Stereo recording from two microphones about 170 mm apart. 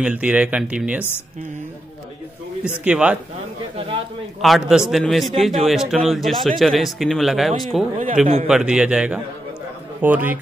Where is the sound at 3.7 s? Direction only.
35° right (ahead or behind).